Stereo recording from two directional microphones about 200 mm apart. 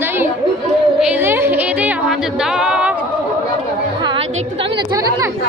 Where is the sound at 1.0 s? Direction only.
5° right (ahead or behind).